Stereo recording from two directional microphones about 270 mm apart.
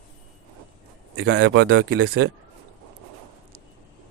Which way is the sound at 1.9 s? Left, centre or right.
Right.